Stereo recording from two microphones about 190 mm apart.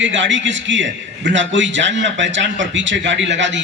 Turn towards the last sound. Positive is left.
turn(degrees=-75)  # may be behind; listen again after turning